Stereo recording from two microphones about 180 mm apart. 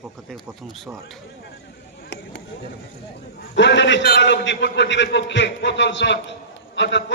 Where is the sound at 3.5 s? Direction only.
80° left.